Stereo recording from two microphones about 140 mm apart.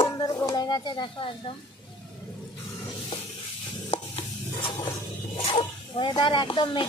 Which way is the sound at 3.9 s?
40° left (ahead or behind).